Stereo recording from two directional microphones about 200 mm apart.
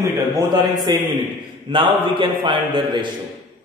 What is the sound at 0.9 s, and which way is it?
A man's voice, 20° right (ahead or behind).